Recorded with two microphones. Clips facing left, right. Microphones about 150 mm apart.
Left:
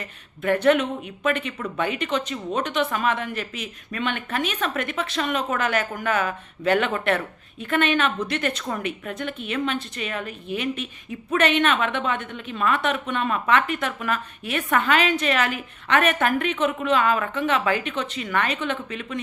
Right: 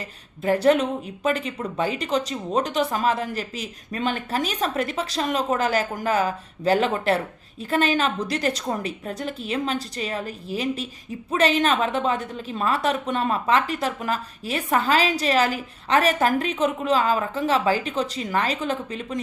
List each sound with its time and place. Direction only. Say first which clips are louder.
0.0 s a woman's voice: right 1 dB; 30° right (ahead or behind)